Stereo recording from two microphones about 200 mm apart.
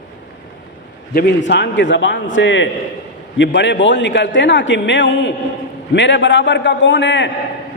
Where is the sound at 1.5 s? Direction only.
60° left (ahead or behind).